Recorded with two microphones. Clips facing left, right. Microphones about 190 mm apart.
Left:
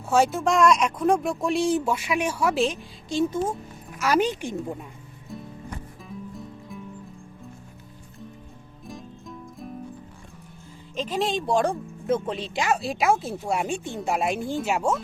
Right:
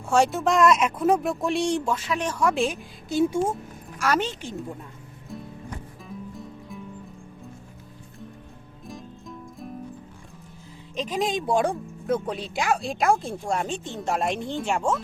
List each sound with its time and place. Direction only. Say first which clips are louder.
0.1 s speech: even; centre (ahead or behind)
3.9 s a woman's voice: left 3 dB; 10° left (ahead or behind)
5.3 s music: even; centre (ahead or behind)
8.9 s music: even; centre (ahead or behind)
10.9 s speech: even; centre (ahead or behind)